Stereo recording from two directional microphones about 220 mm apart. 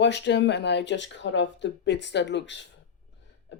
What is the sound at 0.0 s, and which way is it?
Speech, 50° left (ahead or behind).